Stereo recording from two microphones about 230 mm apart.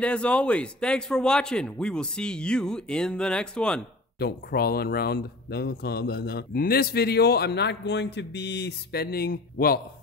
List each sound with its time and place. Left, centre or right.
0.0 s a man's voice: centre
4.2 s speech: left